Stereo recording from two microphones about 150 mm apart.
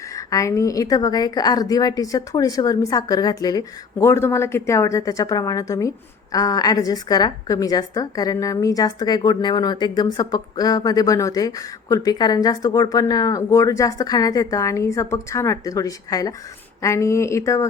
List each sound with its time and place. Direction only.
0.2 s a woman's voice: 20° left (ahead or behind)